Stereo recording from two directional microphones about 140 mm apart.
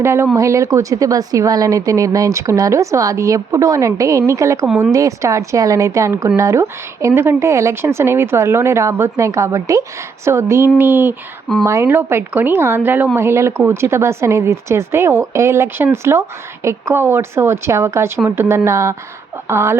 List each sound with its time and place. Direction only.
0.0 s speech: 20° right (ahead or behind)
4.6 s speech: 5° right (ahead or behind)
4.9 s speech: 25° right (ahead or behind)